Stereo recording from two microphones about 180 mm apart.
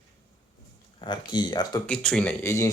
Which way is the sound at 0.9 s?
25° left (ahead or behind).